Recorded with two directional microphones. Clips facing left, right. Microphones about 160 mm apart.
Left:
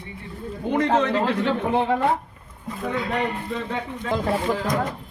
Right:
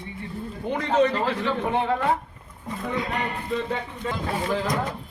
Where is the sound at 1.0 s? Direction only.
80° left.